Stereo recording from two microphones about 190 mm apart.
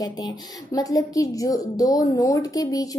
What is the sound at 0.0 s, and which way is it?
A woman's voice, 20° left (ahead or behind).